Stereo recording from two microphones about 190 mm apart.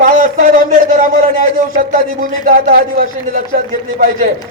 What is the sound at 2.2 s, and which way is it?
Speech, 45° right (ahead or behind).